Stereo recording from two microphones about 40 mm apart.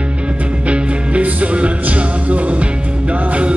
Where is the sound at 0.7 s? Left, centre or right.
Right.